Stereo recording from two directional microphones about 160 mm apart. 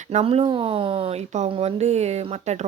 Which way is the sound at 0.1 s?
40° right (ahead or behind).